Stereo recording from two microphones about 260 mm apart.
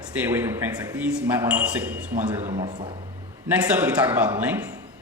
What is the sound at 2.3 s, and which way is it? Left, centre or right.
Speech, right.